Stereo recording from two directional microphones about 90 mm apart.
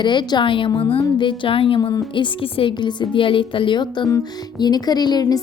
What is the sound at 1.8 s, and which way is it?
A woman's voice, 50° left (ahead or behind).